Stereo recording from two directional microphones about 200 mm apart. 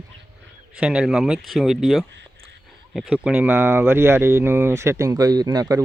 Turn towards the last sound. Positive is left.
turn(degrees=-20)  # may be behind; listen again after turning